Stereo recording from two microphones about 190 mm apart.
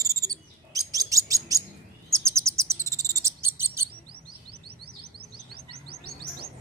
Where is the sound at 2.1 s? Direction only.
15° right (ahead or behind).